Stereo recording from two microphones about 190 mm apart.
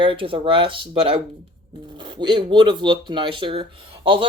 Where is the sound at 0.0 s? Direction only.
30° right (ahead or behind).